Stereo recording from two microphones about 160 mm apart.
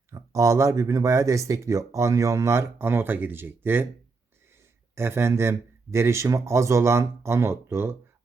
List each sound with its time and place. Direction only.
0.1 s speech: 20° right (ahead or behind)
4.9 s a man's voice: 15° right (ahead or behind)